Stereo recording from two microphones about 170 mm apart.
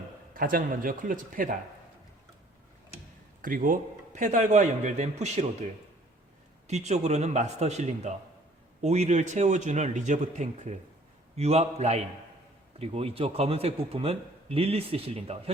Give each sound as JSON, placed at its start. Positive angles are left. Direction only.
{"t": 0.3, "sound": "a man's voice", "side_deg": -55}
{"t": 3.4, "sound": "a man's voice", "side_deg": -50}
{"t": 6.7, "sound": "a man's voice", "side_deg": -40}